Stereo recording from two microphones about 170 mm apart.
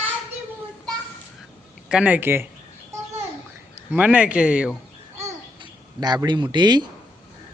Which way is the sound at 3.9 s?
10° right (ahead or behind).